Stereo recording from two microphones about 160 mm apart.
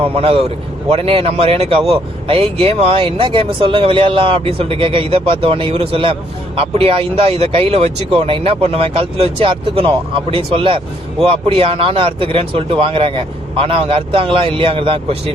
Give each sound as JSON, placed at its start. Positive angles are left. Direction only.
{"t": 0.0, "sound": "speech", "side_deg": -35}